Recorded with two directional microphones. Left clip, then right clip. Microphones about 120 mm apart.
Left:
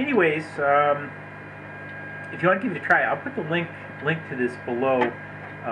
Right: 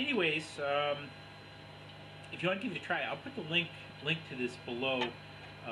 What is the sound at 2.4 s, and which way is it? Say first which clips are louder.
Speech: left 14 dB; 25° right (ahead or behind).